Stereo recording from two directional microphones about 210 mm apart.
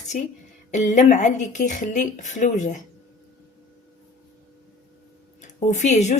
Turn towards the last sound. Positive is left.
turn(degrees=35)  # may be behind; listen again after turning